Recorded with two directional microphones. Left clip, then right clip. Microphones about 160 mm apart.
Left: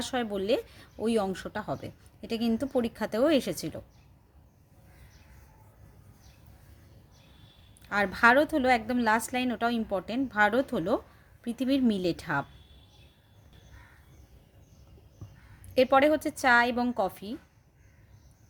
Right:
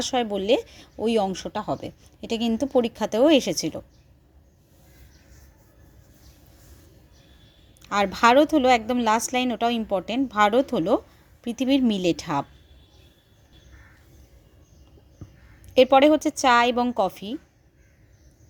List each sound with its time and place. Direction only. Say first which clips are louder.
0.0 s speech: right 6 dB; 20° right (ahead or behind)
7.8 s speech: right 4 dB; 25° right (ahead or behind)
15.9 s speech: right 6 dB; 20° right (ahead or behind)